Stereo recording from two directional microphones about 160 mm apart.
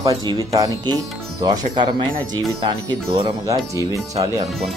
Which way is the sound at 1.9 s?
30° right (ahead or behind).